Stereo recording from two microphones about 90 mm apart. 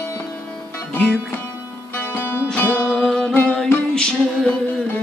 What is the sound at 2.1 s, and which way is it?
Music, 25° left (ahead or behind).